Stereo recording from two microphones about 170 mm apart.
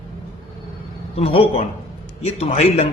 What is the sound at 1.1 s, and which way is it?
A man's voice, 35° left (ahead or behind).